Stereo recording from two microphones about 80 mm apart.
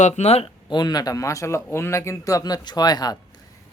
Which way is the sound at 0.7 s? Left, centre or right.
Left.